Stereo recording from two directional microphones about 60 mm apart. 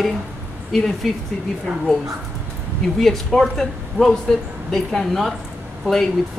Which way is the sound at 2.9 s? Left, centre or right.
Centre.